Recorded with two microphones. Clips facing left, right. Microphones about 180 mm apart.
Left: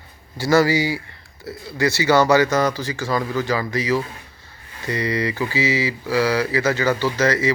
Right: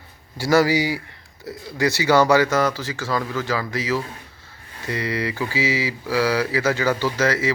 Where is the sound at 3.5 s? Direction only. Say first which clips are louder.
Left 2 dB; 5° right (ahead or behind).